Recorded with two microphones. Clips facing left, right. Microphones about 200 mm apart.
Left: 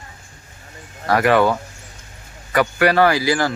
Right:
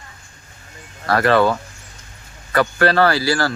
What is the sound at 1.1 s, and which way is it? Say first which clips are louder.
Speech: even; 15° left (ahead or behind).